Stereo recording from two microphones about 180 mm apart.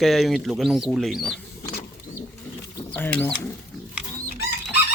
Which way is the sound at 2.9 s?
5° left (ahead or behind).